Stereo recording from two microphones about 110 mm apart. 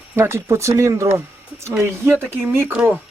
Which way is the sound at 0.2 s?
25° right (ahead or behind).